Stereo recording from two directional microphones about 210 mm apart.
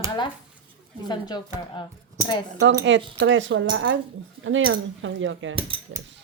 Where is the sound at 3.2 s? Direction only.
60° right (ahead or behind).